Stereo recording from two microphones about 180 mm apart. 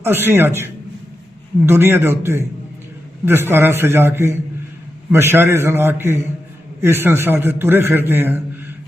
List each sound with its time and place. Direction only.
0.0 s a man's voice: 10° right (ahead or behind)